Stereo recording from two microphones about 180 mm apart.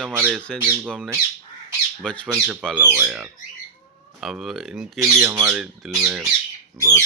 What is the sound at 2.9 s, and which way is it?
Speech, 10° right (ahead or behind).